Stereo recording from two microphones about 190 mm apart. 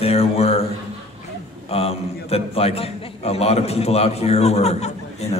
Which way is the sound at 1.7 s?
30° left (ahead or behind).